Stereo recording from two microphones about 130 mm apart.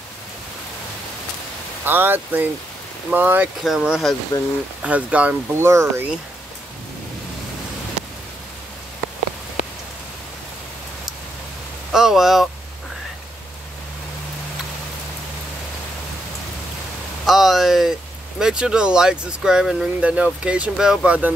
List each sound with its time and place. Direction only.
1.9 s speech: 15° right (ahead or behind)
4.3 s speech: 20° left (ahead or behind)
4.8 s speech: 10° right (ahead or behind)
5.7 s speech: 20° right (ahead or behind)
11.9 s speech: centre (ahead or behind)
17.3 s speech: centre (ahead or behind)